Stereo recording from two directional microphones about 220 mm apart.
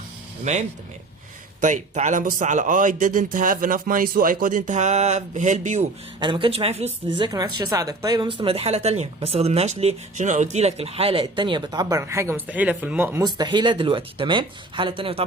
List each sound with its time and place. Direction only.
0.5 s speech: 30° right (ahead or behind)
1.6 s speech: 35° right (ahead or behind)
6.1 s speech: 20° right (ahead or behind)